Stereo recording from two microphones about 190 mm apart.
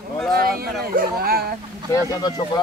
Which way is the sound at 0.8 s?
50° right (ahead or behind).